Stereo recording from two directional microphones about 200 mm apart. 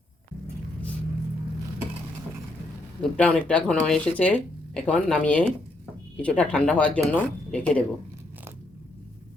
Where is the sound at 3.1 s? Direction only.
5° left (ahead or behind).